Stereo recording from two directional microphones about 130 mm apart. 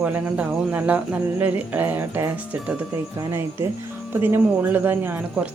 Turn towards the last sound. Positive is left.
turn(degrees=-15)  # may be behind; listen again after turning